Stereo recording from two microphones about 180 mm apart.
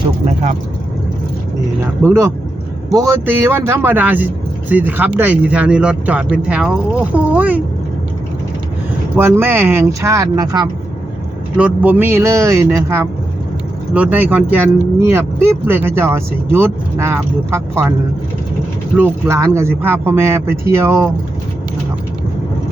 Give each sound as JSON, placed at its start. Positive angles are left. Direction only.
{"t": 2.0, "sound": "speech", "side_deg": -15}
{"t": 9.1, "sound": "speech", "side_deg": -10}
{"t": 11.5, "sound": "speech", "side_deg": -5}
{"t": 18.9, "sound": "speech", "side_deg": -15}